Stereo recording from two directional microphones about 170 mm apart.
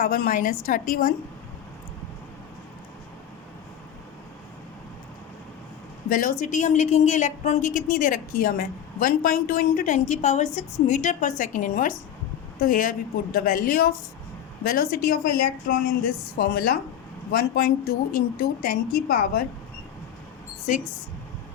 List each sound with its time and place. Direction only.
0.0 s a woman's voice: 55° left (ahead or behind)
6.1 s a woman's voice: 55° left (ahead or behind)